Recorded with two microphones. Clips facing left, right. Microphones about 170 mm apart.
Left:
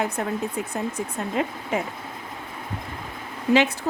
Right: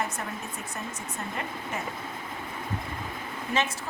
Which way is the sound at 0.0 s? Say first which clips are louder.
Left 8 dB; 60° left (ahead or behind).